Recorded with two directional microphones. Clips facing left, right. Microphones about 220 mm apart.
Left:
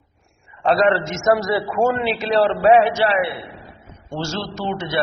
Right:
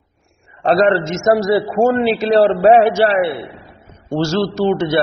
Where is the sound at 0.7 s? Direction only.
35° right (ahead or behind).